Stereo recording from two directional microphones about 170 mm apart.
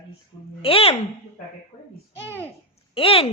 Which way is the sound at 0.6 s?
35° left (ahead or behind).